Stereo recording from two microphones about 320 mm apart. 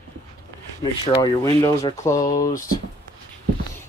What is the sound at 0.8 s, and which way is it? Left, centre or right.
Speech, centre.